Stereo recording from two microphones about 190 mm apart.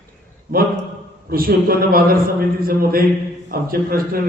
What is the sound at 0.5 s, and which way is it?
A man's voice, 50° right (ahead or behind).